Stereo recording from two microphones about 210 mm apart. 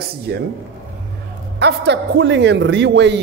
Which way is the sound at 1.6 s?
55° right (ahead or behind).